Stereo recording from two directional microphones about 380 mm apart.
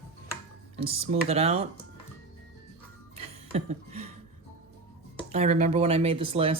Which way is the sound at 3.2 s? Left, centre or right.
Centre.